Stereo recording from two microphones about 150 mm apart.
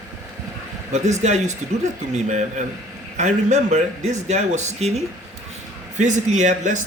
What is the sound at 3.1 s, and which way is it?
A man's voice, 50° right (ahead or behind).